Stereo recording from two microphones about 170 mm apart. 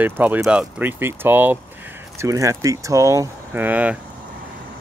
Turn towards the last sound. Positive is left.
turn(degrees=-10)  # may be behind; listen again after turning